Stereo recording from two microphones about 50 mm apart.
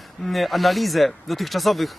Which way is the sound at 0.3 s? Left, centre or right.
Centre.